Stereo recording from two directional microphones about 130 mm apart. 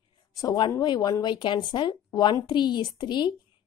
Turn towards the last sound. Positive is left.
turn(degrees=35)  # may be behind; listen again after turning